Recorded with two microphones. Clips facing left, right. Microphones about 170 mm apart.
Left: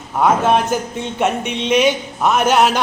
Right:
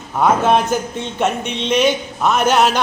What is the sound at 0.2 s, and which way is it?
Speech, 5° left (ahead or behind).